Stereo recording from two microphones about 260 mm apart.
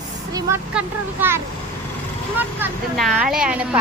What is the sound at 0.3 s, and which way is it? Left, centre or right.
Speech, centre.